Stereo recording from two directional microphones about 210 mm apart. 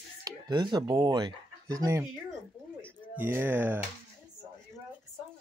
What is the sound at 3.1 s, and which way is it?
Speech, 10° right (ahead or behind).